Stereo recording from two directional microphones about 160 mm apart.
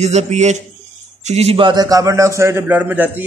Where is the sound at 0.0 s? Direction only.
45° right (ahead or behind).